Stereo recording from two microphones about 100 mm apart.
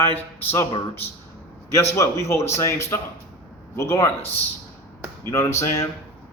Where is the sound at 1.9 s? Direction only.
30° left (ahead or behind).